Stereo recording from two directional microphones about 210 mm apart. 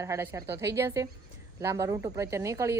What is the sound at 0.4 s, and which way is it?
Speech, 50° right (ahead or behind).